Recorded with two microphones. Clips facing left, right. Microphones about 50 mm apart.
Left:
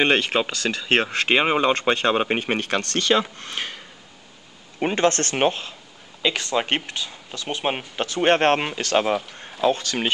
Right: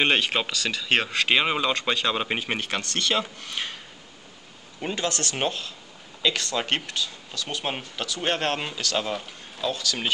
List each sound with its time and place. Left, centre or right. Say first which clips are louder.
0.0 s speech: left 3 dB; left
1.7 s speech: left 5 dB; left
4.8 s speech: left 8 dB; left
5.3 s speech: left 6 dB; left